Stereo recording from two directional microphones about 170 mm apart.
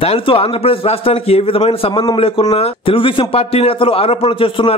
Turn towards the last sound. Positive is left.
turn(degrees=30)  # may be behind; listen again after turning